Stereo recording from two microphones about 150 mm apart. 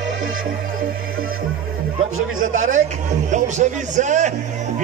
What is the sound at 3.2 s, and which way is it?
Music, 55° right (ahead or behind).